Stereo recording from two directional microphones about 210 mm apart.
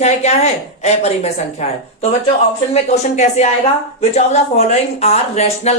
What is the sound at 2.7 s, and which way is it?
Speech, 30° left (ahead or behind).